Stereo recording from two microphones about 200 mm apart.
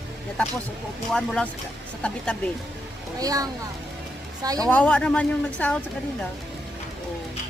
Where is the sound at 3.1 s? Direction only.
20° right (ahead or behind).